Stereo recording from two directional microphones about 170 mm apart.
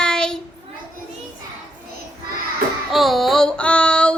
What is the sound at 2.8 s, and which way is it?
A woman's voice, centre (ahead or behind).